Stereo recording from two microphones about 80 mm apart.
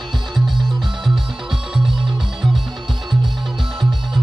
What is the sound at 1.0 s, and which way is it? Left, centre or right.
Music, centre.